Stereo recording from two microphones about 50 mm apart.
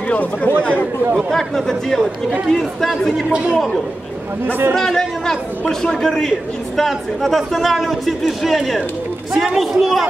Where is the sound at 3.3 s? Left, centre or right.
Right.